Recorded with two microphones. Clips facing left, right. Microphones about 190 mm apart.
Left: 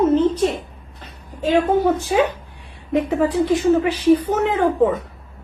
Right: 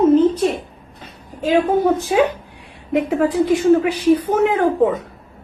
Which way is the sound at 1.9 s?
15° right (ahead or behind).